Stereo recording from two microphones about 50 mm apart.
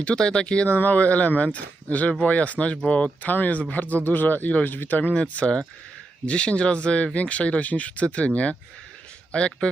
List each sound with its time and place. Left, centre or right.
0.0 s speech: centre
0.7 s speech: left